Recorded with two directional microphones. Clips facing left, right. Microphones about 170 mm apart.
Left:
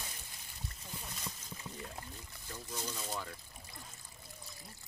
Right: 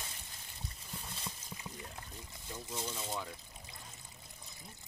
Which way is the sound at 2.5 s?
20° right (ahead or behind).